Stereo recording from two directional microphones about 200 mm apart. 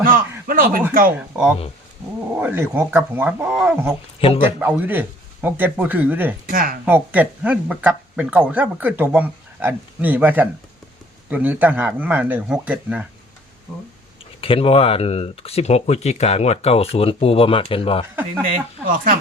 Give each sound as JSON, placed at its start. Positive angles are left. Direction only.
{"t": 0.0, "sound": "speech", "side_deg": -45}
{"t": 1.3, "sound": "speech", "side_deg": -10}
{"t": 6.5, "sound": "speech", "side_deg": -45}
{"t": 6.8, "sound": "speech", "side_deg": -10}
{"t": 14.4, "sound": "speech", "side_deg": 25}
{"t": 18.4, "sound": "speech", "side_deg": -45}